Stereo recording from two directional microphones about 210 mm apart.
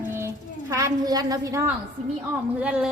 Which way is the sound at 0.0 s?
10° right (ahead or behind).